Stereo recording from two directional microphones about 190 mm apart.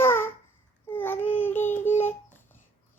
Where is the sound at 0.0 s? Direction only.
10° left (ahead or behind).